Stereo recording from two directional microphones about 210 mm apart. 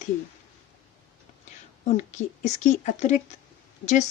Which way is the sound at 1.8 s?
35° left (ahead or behind).